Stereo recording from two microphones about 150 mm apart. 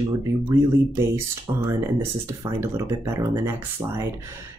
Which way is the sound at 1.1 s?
15° right (ahead or behind).